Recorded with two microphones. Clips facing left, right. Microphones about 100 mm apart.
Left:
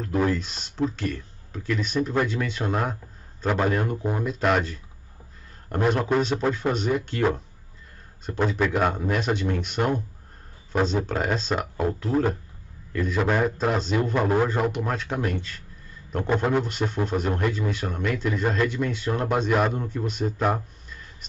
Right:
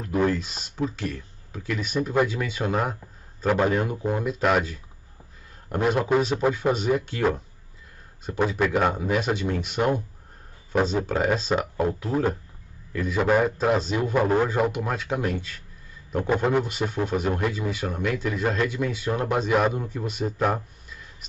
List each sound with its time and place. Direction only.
0.0 s a man's voice: centre (ahead or behind)